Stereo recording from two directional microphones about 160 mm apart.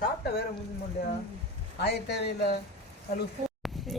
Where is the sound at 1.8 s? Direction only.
90° left.